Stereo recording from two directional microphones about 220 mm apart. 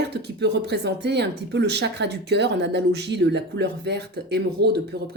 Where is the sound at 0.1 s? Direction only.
50° right (ahead or behind).